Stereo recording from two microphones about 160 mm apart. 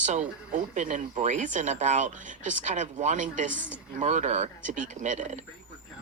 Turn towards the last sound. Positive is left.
turn(degrees=-50)  # may be behind; listen again after turning